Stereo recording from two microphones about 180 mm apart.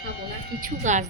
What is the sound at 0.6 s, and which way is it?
Speech, 45° right (ahead or behind).